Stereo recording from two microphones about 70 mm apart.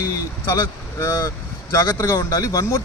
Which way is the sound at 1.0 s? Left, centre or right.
Left.